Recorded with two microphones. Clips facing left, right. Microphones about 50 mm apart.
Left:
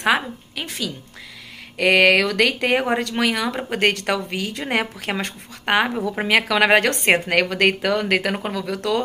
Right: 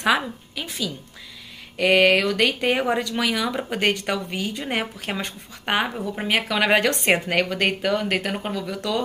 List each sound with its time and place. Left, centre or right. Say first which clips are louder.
0.6 s speech: left 1 dB; left
1.8 s speech: left 2 dB; left
2.8 s speech: left 2 dB; left
3.9 s speech: left 2 dB; left
4.6 s speech: left 4 dB; left
5.2 s speech: left 3 dB; left
6.2 s speech: left 4 dB; left
6.6 s speech: left 3 dB; left
7.2 s speech: left 4 dB; left